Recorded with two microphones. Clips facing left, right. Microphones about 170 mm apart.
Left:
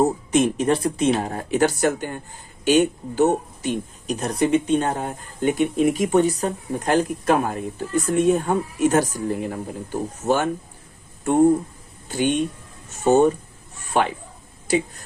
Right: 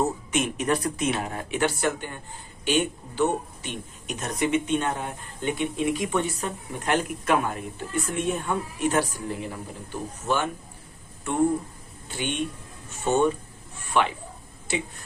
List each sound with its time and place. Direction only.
0.0 s speech: 35° left (ahead or behind)
12.0 s speech: 40° left (ahead or behind)